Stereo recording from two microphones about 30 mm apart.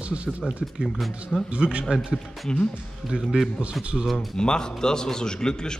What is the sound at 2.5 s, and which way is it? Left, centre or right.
Speech, left.